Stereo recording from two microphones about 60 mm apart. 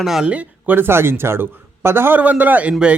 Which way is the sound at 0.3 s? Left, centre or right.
Right.